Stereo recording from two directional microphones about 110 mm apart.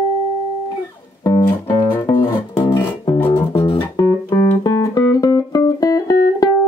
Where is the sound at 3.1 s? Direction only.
20° left (ahead or behind).